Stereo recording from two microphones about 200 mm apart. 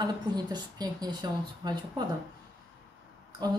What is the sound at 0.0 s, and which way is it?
Speech, 20° right (ahead or behind).